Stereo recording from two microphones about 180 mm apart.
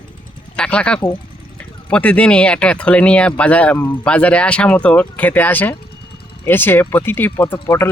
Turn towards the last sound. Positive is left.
turn(degrees=15)  # may be behind; listen again after turning